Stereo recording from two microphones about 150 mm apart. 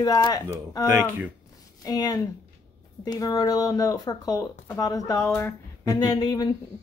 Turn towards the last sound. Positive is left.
turn(degrees=25)  # may be behind; listen again after turning